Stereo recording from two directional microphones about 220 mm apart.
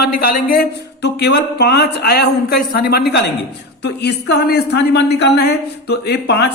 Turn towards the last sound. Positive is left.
turn(degrees=50)  # may be behind; listen again after turning